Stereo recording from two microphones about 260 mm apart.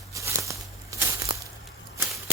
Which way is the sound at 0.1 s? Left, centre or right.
Centre.